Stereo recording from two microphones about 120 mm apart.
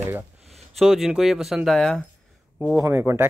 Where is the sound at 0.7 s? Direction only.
Centre (ahead or behind).